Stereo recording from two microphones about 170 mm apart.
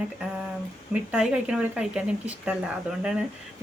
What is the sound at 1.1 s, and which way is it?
Speech, 5° right (ahead or behind).